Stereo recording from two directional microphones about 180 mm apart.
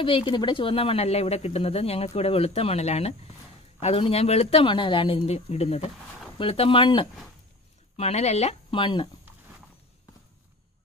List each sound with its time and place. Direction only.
0.0 s speech: 30° left (ahead or behind)